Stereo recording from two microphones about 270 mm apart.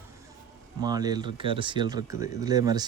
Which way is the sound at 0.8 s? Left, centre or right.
Centre.